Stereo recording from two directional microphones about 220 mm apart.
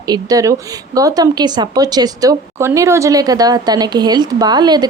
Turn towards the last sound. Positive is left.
turn(degrees=-20)  # may be behind; listen again after turning